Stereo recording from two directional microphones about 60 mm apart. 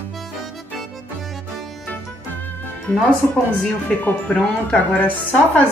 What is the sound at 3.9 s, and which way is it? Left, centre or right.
Speech, centre.